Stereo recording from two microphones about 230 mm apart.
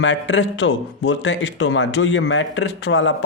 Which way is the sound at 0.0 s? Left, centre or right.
Left.